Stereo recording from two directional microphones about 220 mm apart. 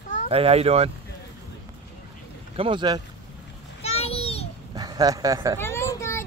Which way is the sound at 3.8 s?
25° left (ahead or behind).